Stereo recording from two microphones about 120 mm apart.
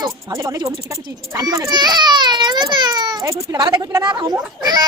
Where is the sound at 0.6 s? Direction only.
25° right (ahead or behind).